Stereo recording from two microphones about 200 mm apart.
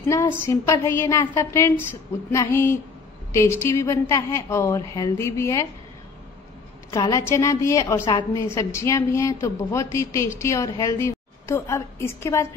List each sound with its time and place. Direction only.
0.0 s a woman's voice: 15° left (ahead or behind)
6.9 s a woman's voice: 15° left (ahead or behind)